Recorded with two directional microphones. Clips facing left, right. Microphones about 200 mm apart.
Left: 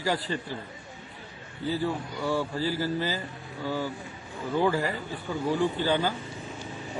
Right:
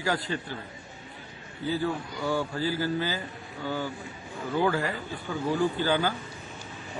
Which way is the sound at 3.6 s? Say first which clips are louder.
Left 1 dB; 5° left (ahead or behind).